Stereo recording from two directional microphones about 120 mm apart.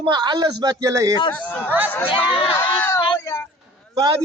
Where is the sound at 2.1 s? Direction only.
45° left (ahead or behind).